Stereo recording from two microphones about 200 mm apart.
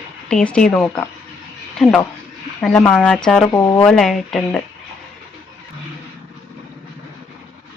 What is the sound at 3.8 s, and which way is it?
Speech, centre (ahead or behind).